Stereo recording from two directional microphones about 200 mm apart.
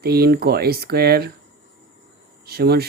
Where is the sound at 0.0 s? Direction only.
50° right (ahead or behind).